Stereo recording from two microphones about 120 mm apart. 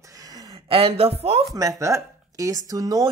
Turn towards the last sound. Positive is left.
turn(degrees=-30)  # may be behind; listen again after turning